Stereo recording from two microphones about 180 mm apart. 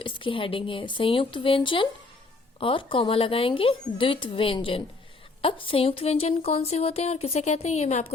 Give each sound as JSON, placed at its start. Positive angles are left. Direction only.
{"t": 0.0, "sound": "a woman's voice", "side_deg": 30}